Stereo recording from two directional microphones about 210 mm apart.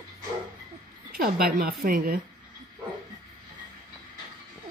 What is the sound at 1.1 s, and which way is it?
Speech, 45° right (ahead or behind).